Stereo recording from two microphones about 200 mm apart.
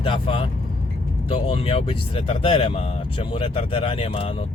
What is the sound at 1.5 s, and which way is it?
Speech, 30° left (ahead or behind).